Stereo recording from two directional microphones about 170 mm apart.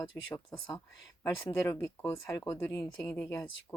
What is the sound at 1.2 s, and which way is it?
Speech, 15° left (ahead or behind).